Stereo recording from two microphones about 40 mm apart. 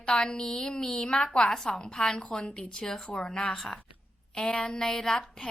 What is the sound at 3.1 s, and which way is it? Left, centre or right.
Speech, centre.